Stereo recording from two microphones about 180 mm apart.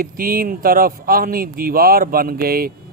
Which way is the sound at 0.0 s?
55° right (ahead or behind).